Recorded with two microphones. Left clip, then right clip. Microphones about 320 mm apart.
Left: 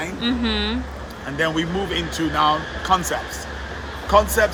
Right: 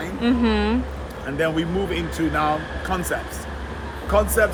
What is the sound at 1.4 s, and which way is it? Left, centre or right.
Speech, left.